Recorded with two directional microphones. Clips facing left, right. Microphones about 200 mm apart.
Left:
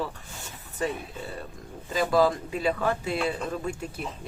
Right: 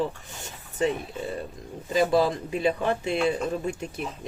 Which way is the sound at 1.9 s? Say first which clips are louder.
Right 1 dB; 25° right (ahead or behind).